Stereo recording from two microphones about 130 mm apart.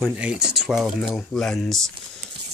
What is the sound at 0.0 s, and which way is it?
Speech, 10° right (ahead or behind).